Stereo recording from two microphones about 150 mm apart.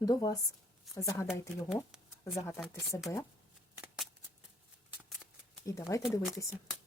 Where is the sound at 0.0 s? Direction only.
25° left (ahead or behind).